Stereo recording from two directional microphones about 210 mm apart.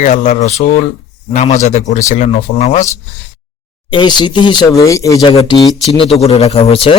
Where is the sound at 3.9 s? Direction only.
20° left (ahead or behind).